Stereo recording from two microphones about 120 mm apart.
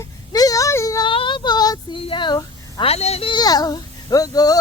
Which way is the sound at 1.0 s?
45° left (ahead or behind).